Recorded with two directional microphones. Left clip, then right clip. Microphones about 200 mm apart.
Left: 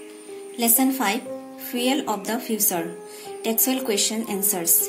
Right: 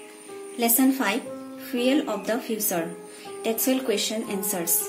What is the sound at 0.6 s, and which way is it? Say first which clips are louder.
Speech: left 1 dB; 25° left (ahead or behind).